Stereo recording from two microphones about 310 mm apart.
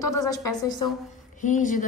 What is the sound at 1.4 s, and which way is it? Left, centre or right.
Speech, left.